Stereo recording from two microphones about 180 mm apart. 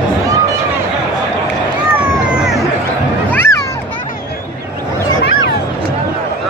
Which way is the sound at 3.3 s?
10° left (ahead or behind).